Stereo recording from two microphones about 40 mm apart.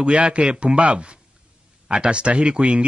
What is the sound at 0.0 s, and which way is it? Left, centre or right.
Speech, right.